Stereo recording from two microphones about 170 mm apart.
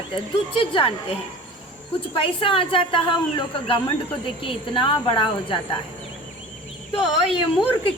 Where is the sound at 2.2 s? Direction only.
30° left (ahead or behind).